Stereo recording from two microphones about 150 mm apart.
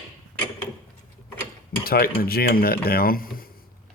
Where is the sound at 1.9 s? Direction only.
90° left.